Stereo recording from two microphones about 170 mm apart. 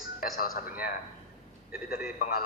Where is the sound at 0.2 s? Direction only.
60° left (ahead or behind).